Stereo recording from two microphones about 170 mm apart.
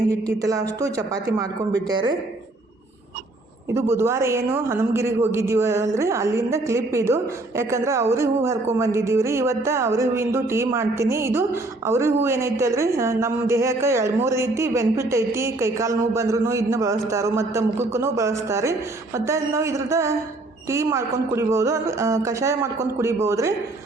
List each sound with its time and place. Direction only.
0.3 s speech: 20° right (ahead or behind)
3.8 s a woman's voice: 15° right (ahead or behind)